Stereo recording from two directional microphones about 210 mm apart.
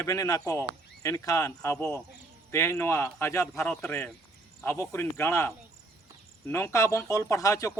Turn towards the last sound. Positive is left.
turn(degrees=15)  # may be behind; listen again after turning